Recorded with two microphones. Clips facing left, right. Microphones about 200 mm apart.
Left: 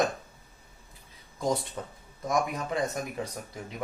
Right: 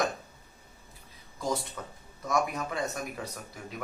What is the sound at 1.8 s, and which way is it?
Speech, 30° left (ahead or behind).